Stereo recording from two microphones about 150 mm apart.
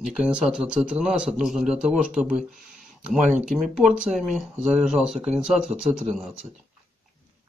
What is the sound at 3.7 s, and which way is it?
Speech, 5° right (ahead or behind).